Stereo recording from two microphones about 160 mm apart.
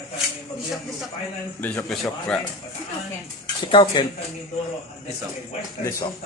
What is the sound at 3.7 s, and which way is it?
Speech, 25° left (ahead or behind).